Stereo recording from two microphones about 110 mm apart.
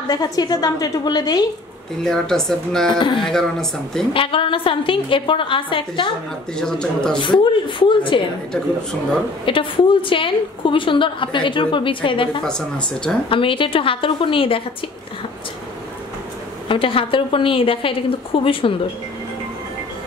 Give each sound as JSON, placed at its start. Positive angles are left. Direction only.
{"t": 0.1, "sound": "a woman's voice", "side_deg": 35}
{"t": 2.0, "sound": "a woman's voice", "side_deg": 5}
{"t": 2.9, "sound": "a woman's voice", "side_deg": 45}
{"t": 3.3, "sound": "a woman's voice", "side_deg": 5}
{"t": 4.1, "sound": "a woman's voice", "side_deg": 55}
{"t": 6.6, "sound": "speech", "side_deg": 5}
{"t": 7.2, "sound": "a woman's voice", "side_deg": 50}
{"t": 9.5, "sound": "a woman's voice", "side_deg": 50}
{"t": 12.4, "sound": "speech", "side_deg": 5}
{"t": 13.3, "sound": "a woman's voice", "side_deg": 50}
{"t": 16.6, "sound": "a woman's voice", "side_deg": 55}